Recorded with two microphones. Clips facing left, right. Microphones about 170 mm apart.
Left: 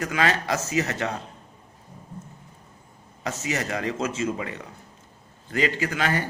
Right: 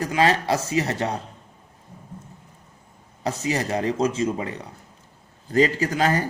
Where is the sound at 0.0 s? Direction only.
30° right (ahead or behind).